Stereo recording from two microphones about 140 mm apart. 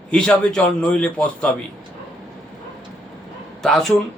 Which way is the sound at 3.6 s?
Centre (ahead or behind).